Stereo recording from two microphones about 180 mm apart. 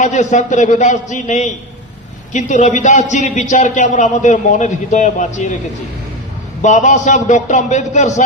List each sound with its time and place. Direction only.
0.0 s a man's voice: 45° left (ahead or behind)
6.6 s a man's voice: 40° left (ahead or behind)